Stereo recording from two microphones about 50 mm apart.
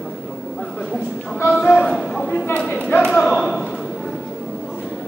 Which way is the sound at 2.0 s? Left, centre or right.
Centre.